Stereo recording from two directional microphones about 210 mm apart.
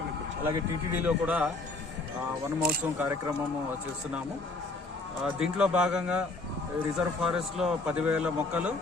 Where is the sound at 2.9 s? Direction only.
10° right (ahead or behind).